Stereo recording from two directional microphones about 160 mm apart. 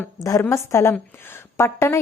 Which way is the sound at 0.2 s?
20° left (ahead or behind).